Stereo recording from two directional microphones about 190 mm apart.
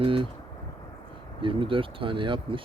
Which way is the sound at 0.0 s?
30° right (ahead or behind).